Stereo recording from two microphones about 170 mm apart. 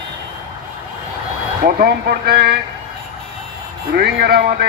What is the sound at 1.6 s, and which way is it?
Speech, 60° right (ahead or behind).